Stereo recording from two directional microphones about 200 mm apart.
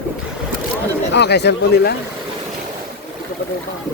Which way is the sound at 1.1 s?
55° left (ahead or behind).